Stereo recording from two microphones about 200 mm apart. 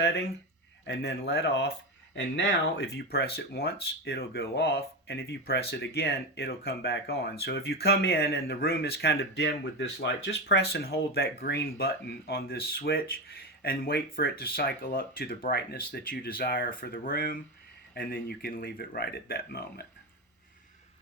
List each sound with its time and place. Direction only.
0.0 s speech: 60° left (ahead or behind)
2.1 s speech: 70° left (ahead or behind); by 19.9 s 50° left (ahead or behind)